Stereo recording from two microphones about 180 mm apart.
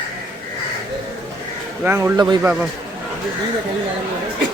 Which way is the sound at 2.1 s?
20° right (ahead or behind).